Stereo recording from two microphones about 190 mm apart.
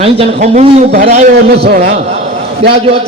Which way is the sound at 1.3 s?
55° right (ahead or behind).